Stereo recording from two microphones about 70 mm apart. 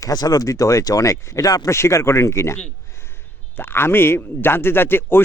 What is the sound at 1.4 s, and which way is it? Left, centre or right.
Speech, left.